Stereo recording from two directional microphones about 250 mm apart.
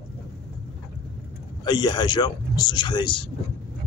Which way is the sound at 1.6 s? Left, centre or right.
Centre.